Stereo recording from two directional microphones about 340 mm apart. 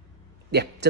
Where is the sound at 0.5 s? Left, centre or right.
Right.